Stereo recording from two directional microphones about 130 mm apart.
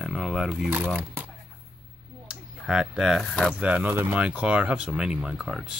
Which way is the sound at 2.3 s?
5° right (ahead or behind).